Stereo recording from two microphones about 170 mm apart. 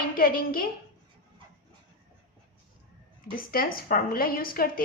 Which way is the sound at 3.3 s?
60° left (ahead or behind).